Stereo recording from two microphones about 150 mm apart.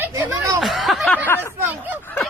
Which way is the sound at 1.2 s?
15° left (ahead or behind).